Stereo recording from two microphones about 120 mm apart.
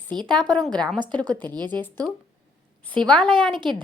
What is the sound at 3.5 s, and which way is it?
Speech, 40° right (ahead or behind).